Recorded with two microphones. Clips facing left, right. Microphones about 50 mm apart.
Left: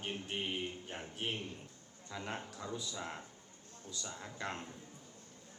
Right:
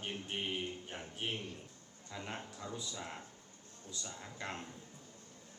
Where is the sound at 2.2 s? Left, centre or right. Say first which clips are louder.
Left 2 dB; left.